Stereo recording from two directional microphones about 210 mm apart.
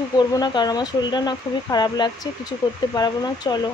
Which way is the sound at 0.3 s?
20° left (ahead or behind).